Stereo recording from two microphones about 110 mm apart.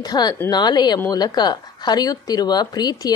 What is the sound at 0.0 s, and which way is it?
A woman's voice, 40° left (ahead or behind).